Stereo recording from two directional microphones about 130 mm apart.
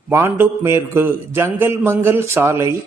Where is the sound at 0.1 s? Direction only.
15° right (ahead or behind).